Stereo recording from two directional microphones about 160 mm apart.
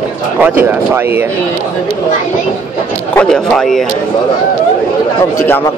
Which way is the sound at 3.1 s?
5° left (ahead or behind).